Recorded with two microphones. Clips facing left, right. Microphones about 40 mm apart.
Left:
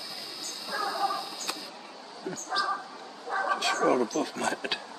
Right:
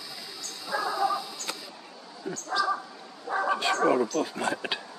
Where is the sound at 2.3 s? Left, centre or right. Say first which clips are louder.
Right 3 dB; centre.